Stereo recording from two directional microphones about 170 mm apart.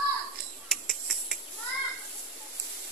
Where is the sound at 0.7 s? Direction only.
Centre (ahead or behind).